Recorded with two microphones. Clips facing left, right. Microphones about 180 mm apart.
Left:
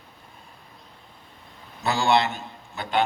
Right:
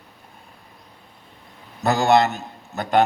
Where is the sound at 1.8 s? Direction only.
45° right (ahead or behind).